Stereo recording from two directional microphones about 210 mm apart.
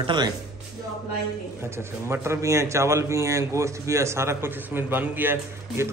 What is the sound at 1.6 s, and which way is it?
Speech, 10° right (ahead or behind).